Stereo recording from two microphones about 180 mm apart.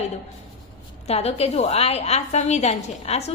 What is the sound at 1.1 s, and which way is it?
A woman's voice, 35° left (ahead or behind).